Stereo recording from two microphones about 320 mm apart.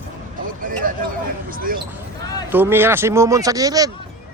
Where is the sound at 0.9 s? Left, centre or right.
Right.